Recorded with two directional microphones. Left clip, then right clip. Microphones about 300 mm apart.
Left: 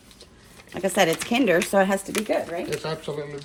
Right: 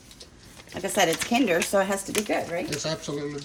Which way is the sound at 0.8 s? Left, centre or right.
Left.